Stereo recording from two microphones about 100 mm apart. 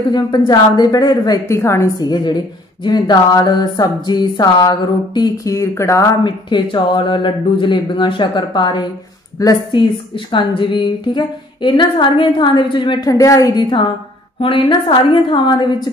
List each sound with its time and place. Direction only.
0.1 s a woman's voice: 45° left (ahead or behind)
1.4 s a woman's voice: 25° left (ahead or behind)
2.0 s a woman's voice: 45° left (ahead or behind)
5.5 s a woman's voice: 30° left (ahead or behind)
6.2 s a woman's voice: 50° left (ahead or behind)
13.1 s a woman's voice: 35° left (ahead or behind)
13.6 s a woman's voice: 50° left (ahead or behind)